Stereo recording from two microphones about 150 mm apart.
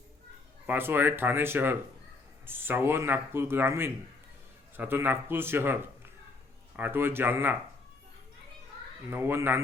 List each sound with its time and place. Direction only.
0.7 s speech: 15° right (ahead or behind)
6.7 s speech: 15° right (ahead or behind)
9.0 s speech: 15° right (ahead or behind)